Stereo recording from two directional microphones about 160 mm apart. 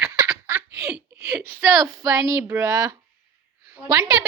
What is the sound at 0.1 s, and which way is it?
Giggle, 15° right (ahead or behind).